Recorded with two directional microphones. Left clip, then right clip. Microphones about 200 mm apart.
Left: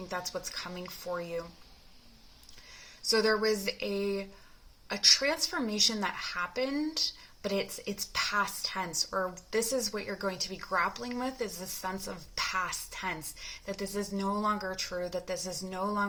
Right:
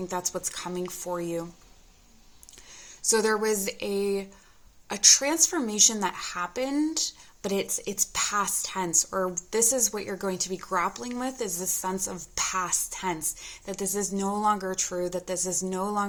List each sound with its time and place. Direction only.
0.1 s speech: 45° right (ahead or behind)
3.1 s speech: 45° right (ahead or behind)